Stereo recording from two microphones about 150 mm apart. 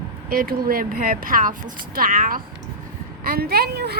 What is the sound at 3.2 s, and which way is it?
Speech, 85° right.